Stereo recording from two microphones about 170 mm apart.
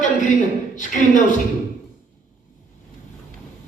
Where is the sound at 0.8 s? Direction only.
50° left (ahead or behind).